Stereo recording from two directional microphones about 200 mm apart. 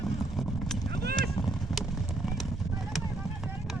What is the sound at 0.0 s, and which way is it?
Clip-clop, centre (ahead or behind).